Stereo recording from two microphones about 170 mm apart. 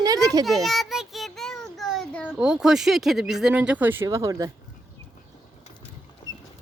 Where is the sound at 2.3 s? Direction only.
5° right (ahead or behind); by 4.5 s 20° right (ahead or behind).